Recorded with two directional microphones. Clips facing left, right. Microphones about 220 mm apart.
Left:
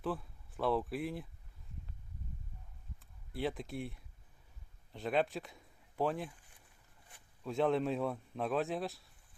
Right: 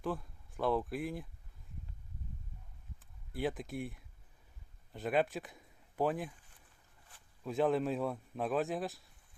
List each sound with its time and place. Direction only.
0.0 s speech: centre (ahead or behind)
3.0 s a sound: centre (ahead or behind)
4.9 s a man's voice: centre (ahead or behind)
7.4 s speech: centre (ahead or behind)